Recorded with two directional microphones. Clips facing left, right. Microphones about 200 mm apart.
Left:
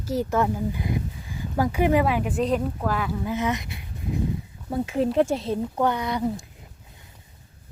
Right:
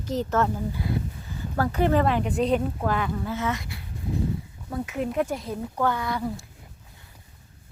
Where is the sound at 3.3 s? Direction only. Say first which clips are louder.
Left 3 dB; 20° left (ahead or behind).